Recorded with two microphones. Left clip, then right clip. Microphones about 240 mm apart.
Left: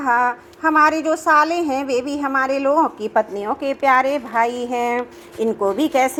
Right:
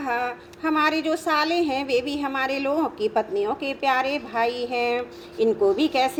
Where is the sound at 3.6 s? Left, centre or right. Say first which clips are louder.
Left 11 dB; left.